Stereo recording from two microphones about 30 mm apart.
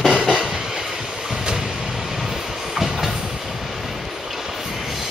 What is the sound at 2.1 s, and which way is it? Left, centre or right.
Train, centre.